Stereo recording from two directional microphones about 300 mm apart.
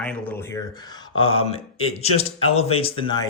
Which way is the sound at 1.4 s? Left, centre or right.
Centre.